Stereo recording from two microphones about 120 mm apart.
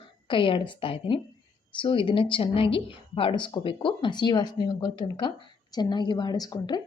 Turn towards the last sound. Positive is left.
turn(degrees=35)  # may be behind; listen again after turning